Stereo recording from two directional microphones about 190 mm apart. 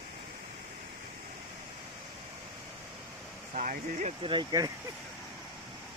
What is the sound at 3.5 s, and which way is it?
Speech, 45° right (ahead or behind).